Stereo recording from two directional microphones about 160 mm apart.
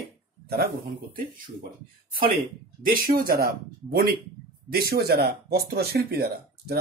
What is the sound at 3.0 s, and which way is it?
Speech, 70° right (ahead or behind).